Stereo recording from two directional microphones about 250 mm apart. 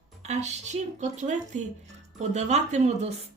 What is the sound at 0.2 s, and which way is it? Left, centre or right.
A woman's voice, right.